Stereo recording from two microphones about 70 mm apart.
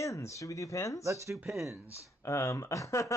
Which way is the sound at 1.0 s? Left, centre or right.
Right.